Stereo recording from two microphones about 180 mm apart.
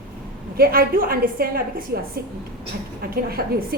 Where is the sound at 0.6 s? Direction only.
55° right (ahead or behind).